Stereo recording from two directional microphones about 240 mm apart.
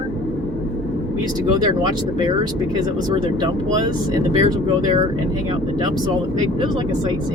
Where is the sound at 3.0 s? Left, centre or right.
Centre.